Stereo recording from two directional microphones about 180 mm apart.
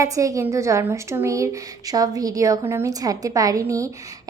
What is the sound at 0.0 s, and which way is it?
A woman's voice, 20° right (ahead or behind).